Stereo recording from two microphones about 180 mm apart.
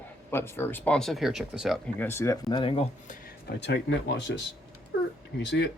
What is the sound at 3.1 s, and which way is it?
Speech, 55° left (ahead or behind).